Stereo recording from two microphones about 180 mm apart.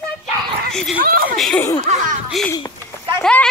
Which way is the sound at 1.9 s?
45° right (ahead or behind).